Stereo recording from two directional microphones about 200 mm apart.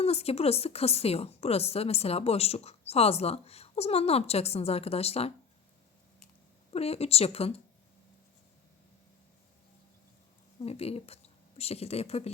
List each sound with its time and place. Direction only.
0.0 s a woman's voice: 30° left (ahead or behind)
6.7 s a woman's voice: 30° left (ahead or behind)
10.6 s speech: 30° left (ahead or behind)